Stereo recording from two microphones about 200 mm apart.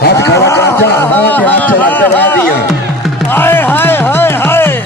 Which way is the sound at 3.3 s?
10° left (ahead or behind).